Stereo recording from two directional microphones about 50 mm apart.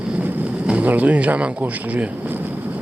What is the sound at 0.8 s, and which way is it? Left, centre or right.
Speech, right.